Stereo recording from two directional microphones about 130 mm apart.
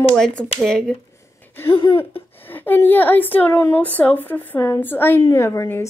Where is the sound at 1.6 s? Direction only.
40° left (ahead or behind).